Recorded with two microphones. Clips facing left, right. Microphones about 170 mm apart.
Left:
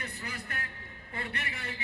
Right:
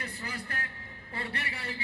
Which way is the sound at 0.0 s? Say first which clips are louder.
Right 2 dB; 30° right (ahead or behind).